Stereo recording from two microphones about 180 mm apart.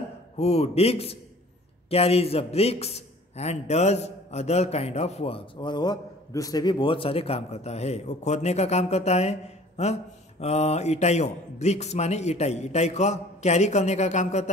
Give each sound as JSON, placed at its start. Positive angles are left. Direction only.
{"t": 0.4, "sound": "a man's voice", "side_deg": 35}